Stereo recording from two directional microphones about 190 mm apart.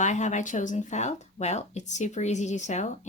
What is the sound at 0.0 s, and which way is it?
Speech, 40° left (ahead or behind).